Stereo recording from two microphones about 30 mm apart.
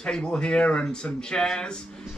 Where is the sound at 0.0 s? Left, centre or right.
Left.